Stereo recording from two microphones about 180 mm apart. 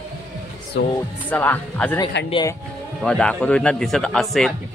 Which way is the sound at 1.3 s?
10° left (ahead or behind).